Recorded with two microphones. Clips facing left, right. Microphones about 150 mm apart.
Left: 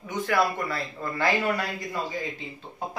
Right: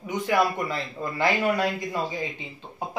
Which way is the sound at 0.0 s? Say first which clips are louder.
Right 2 dB; 15° right (ahead or behind).